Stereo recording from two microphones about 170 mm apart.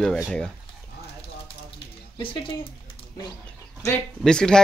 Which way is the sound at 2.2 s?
30° left (ahead or behind).